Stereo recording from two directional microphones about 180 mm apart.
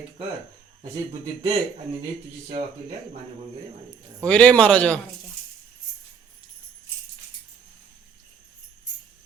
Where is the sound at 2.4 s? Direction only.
40° right (ahead or behind).